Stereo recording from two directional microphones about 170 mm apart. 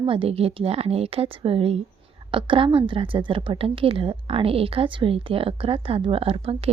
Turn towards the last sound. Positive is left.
turn(degrees=-35)  # may be behind; listen again after turning